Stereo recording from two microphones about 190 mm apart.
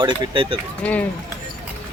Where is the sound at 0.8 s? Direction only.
10° left (ahead or behind).